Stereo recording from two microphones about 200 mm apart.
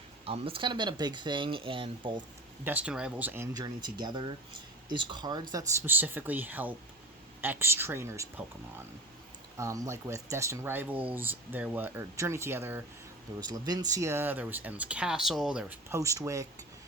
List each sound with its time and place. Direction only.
0.3 s speech: 25° right (ahead or behind)
2.6 s speech: 5° right (ahead or behind)
9.6 s speech: 15° right (ahead or behind)